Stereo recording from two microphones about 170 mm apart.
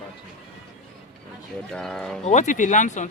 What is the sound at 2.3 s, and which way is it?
Speech, 45° left (ahead or behind).